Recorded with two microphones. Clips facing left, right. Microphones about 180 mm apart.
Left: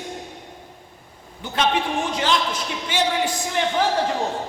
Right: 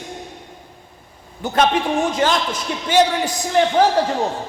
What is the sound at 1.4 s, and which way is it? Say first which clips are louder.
A man's voice: right 5 dB; 45° right (ahead or behind).